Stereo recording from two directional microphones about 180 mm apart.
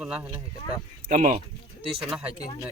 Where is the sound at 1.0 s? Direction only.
50° right (ahead or behind).